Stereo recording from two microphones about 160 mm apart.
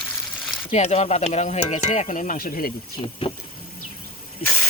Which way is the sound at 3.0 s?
35° left (ahead or behind).